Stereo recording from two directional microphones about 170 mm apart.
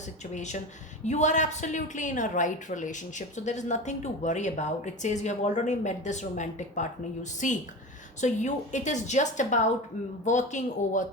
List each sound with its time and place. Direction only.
0.3 s a woman's voice: 45° left (ahead or behind)